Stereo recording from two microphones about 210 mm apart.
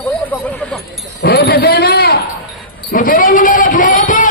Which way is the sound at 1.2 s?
50° left (ahead or behind).